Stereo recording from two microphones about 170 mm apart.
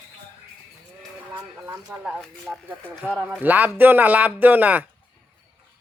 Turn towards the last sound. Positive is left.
turn(degrees=-10)  # may be behind; listen again after turning